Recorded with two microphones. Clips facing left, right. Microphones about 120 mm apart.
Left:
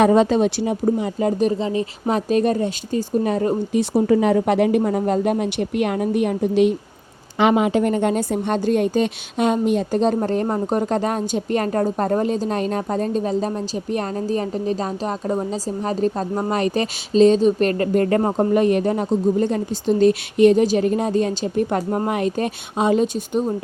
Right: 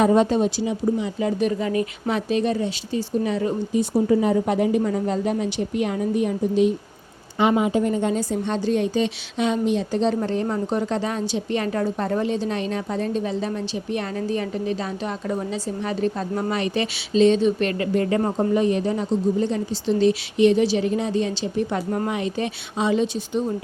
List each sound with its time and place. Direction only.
0.0 s speech: 90° left
0.6 s speech: 50° left (ahead or behind); by 1.9 s 25° left (ahead or behind)
2.0 s a woman's voice: 45° left (ahead or behind)
3.7 s speech: 75° left (ahead or behind)
4.8 s a woman's voice: 55° left (ahead or behind); by 6.7 s 70° left (ahead or behind)
7.3 s a woman's voice: 80° left; by 18.2 s 50° left (ahead or behind)
18.3 s a woman's voice: 60° left (ahead or behind)